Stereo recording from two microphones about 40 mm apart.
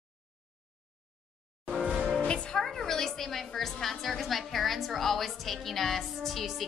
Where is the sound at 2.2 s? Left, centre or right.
Left.